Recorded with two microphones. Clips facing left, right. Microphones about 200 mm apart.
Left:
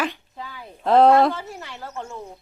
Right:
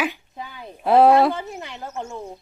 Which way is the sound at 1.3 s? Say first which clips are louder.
Right 3 dB; 20° right (ahead or behind).